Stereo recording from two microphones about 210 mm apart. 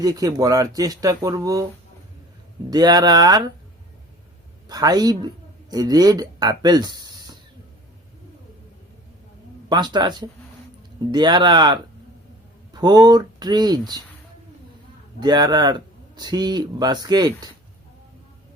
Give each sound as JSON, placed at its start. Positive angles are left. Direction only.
{"t": 0.0, "sound": "speech", "side_deg": -20}
{"t": 2.6, "sound": "speech", "side_deg": -20}
{"t": 4.7, "sound": "speech", "side_deg": -20}
{"t": 9.6, "sound": "speech", "side_deg": -20}
{"t": 15.2, "sound": "speech", "side_deg": -20}